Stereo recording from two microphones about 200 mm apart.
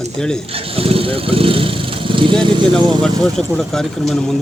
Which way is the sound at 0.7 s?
30° right (ahead or behind).